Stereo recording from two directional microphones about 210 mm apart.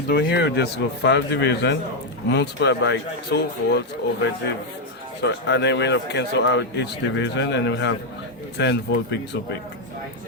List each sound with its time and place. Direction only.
0.1 s a man's voice: 50° left (ahead or behind)